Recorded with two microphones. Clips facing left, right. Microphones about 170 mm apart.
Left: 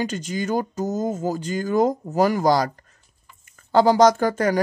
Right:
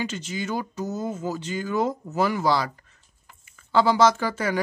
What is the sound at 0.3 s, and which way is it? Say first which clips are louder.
Speech: left 5 dB; 45° left (ahead or behind).